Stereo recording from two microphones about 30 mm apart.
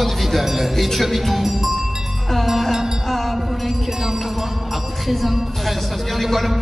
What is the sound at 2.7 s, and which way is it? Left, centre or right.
Music, centre.